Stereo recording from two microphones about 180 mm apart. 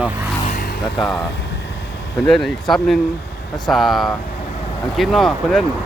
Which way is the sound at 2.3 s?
Centre (ahead or behind).